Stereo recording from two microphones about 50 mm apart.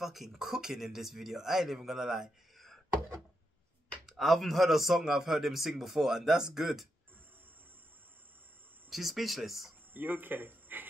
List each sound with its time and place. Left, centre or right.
0.0 s speech: centre
4.0 s a man's voice: centre
8.9 s a man's voice: centre
9.9 s speech: right